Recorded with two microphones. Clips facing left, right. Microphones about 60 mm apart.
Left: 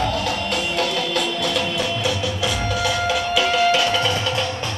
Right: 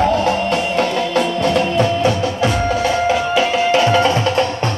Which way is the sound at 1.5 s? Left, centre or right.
Right.